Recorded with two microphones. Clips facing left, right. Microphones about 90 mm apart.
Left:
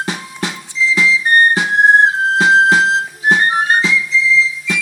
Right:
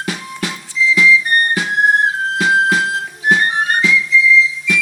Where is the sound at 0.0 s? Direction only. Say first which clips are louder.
Left 1 dB; 25° left (ahead or behind).